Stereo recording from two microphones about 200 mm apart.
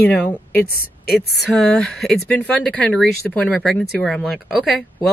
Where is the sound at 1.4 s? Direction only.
Centre (ahead or behind).